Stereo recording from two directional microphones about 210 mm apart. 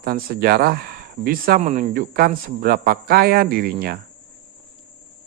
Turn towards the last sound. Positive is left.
turn(degrees=-45)  # may be behind; listen again after turning